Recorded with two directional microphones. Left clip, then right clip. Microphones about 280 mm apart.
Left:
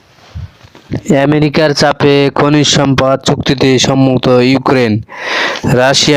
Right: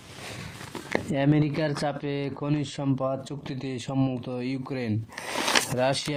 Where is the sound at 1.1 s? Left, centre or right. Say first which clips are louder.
Left 18 dB; left.